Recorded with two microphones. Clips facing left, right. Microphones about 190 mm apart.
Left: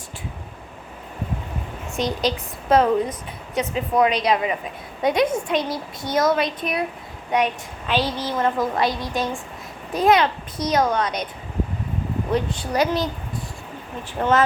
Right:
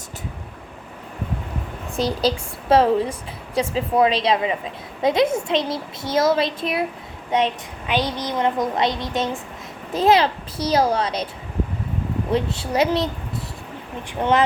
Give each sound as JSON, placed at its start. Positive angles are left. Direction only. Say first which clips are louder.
{"t": 2.0, "sound": "a woman's voice", "louder": "right 2 dB", "side_deg": -30}
{"t": 12.3, "sound": "a woman's voice", "louder": "right 1 dB", "side_deg": -25}
{"t": 14.2, "sound": "a woman's voice", "louder": "even", "side_deg": -15}